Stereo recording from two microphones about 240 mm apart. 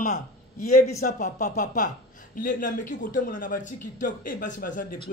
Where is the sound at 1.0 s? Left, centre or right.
Left.